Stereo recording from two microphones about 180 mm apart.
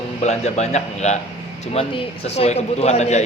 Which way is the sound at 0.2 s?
40° left (ahead or behind).